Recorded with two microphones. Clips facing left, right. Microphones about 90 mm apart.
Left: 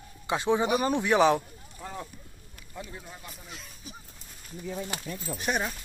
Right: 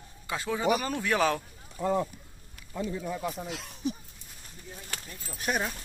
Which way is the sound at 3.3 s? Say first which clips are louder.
Right 8 dB; 85° right.